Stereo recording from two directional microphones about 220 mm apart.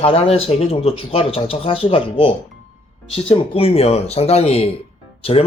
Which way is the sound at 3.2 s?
25° left (ahead or behind).